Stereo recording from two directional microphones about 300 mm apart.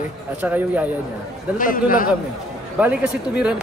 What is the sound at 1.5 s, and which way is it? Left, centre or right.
Speech, left.